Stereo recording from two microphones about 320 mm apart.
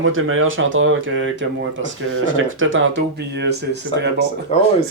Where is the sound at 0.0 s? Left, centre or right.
Right.